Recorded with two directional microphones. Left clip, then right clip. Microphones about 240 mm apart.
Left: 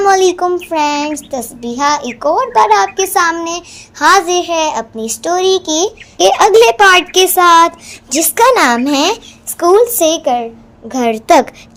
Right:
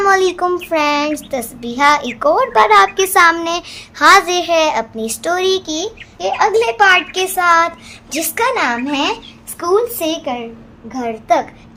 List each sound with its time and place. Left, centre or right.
0.0 s a sound: centre
0.4 s a child's voice: centre
5.6 s a child's voice: left
10.8 s a child's voice: left